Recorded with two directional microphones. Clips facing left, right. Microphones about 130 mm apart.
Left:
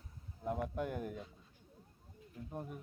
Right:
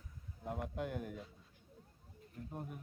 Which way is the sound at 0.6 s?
45° left (ahead or behind).